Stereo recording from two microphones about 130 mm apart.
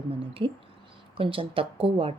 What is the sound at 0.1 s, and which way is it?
A woman's voice, 45° right (ahead or behind).